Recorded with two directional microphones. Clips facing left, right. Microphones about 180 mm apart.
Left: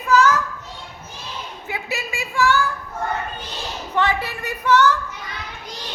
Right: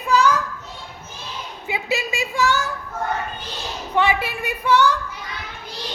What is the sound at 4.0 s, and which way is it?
Speech, 10° right (ahead or behind).